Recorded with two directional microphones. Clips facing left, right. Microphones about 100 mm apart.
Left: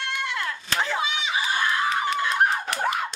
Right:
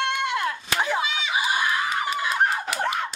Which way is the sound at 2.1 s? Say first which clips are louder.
Left 1 dB; 5° right (ahead or behind).